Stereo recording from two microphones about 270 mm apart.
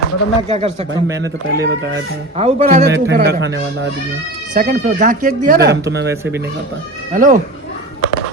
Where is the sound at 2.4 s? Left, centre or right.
Right.